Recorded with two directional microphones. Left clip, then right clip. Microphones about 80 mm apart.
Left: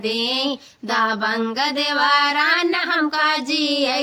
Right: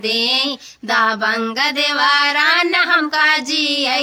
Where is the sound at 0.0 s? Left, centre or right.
Right.